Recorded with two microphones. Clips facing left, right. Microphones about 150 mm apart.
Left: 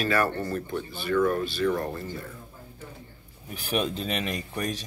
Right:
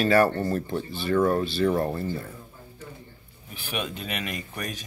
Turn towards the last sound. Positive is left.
turn(degrees=30)  # may be behind; listen again after turning